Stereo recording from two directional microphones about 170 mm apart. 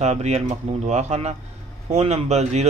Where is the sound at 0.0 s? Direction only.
40° right (ahead or behind).